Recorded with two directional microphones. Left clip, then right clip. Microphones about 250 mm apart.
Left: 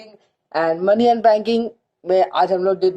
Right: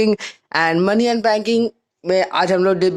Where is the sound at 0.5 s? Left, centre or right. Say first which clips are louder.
Even; right.